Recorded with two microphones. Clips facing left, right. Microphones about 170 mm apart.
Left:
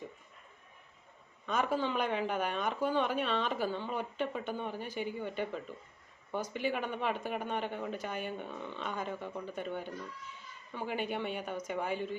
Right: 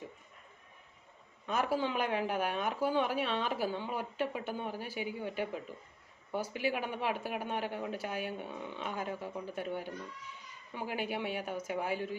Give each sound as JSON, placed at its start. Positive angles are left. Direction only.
{"t": 1.5, "sound": "speech", "side_deg": -5}